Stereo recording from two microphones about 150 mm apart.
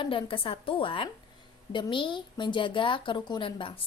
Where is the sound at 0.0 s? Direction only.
35° left (ahead or behind).